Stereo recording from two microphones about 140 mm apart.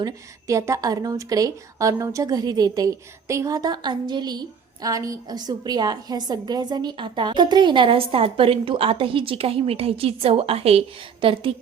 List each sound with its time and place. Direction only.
0.0 s a woman's voice: 20° right (ahead or behind); by 11.5 s 40° right (ahead or behind)